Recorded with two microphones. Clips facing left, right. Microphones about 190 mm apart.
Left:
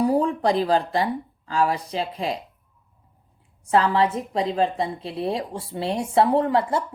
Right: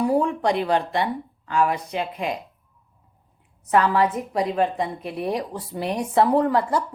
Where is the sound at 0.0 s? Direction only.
35° left (ahead or behind).